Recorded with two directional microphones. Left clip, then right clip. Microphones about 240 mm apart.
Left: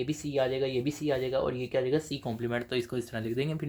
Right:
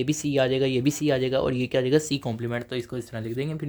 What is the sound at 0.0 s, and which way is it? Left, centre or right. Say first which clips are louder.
Speech: right 6 dB; right.